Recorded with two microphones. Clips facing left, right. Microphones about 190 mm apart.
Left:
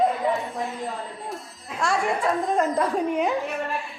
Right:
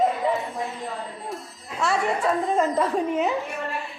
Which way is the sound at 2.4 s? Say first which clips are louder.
Even; centre (ahead or behind).